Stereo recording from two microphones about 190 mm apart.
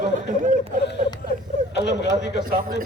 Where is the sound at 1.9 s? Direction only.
65° left (ahead or behind).